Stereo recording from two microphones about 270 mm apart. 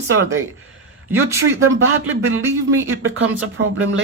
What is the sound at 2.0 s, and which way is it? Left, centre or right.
Speech, right.